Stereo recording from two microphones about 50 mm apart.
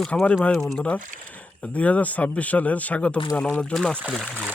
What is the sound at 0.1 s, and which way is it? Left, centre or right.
Speech, left.